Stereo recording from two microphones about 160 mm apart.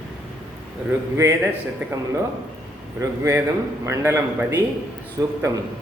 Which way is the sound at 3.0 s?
20° right (ahead or behind).